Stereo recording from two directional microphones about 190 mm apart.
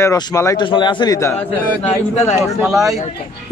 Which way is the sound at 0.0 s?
15° left (ahead or behind).